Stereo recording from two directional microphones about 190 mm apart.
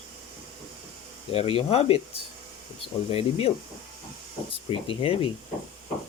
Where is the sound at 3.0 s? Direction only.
30° left (ahead or behind).